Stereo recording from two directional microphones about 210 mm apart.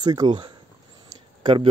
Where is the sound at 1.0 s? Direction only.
25° right (ahead or behind).